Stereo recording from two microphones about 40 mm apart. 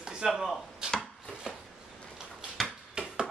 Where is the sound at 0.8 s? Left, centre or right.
Centre.